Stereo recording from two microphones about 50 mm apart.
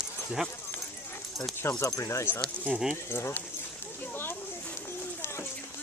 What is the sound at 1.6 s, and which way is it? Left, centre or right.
Speech, left.